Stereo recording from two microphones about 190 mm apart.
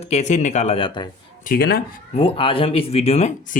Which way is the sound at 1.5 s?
55° left (ahead or behind).